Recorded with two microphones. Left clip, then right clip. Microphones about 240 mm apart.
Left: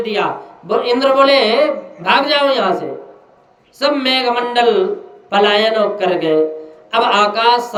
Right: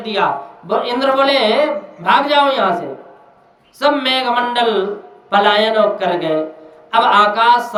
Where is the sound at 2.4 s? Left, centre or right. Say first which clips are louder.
Right 1 dB; right.